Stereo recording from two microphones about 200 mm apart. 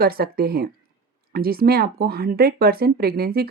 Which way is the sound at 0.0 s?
50° right (ahead or behind).